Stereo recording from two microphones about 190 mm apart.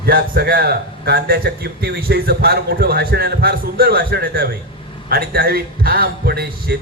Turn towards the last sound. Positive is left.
turn(degrees=-55)  # may be behind; listen again after turning